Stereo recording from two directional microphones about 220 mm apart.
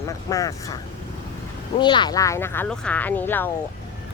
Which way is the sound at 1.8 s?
20° left (ahead or behind).